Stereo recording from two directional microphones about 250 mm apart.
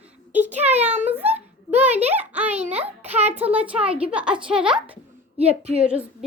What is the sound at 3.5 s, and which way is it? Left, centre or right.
A woman's voice, centre.